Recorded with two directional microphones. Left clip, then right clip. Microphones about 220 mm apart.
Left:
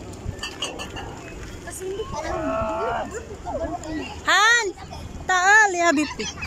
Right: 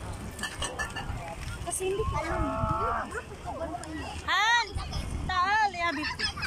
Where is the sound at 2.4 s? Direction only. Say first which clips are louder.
Left 8 dB; 35° left (ahead or behind).